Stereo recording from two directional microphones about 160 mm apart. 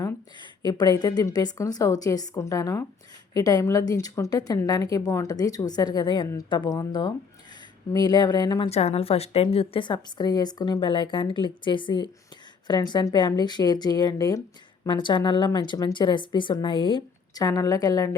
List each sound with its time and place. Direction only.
0.0 s a woman's voice: 25° left (ahead or behind)